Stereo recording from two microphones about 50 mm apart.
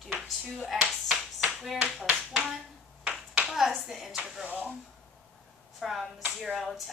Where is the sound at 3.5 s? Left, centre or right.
Centre.